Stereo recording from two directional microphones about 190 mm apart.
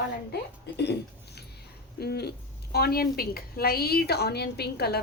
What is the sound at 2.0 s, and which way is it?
A woman's voice, 60° left (ahead or behind).